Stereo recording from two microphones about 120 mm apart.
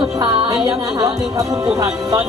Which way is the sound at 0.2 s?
40° right (ahead or behind).